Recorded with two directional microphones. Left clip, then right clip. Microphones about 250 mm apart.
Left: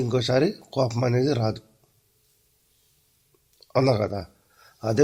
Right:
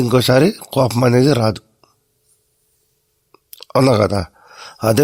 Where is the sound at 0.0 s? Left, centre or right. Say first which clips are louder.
Right 9 dB; right.